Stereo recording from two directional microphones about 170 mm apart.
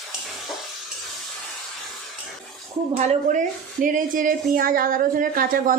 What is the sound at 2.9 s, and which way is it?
A woman's voice, 45° right (ahead or behind).